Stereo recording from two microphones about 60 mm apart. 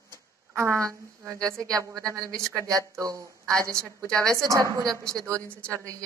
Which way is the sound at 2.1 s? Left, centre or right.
Right.